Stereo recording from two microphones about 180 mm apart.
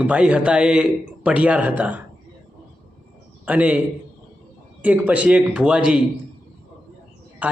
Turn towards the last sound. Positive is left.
turn(degrees=-10)  # may be behind; listen again after turning